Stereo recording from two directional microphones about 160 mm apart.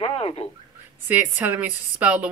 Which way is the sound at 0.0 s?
35° left (ahead or behind).